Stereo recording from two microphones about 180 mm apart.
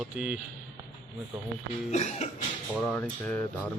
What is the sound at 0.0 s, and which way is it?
Speech, 5° right (ahead or behind).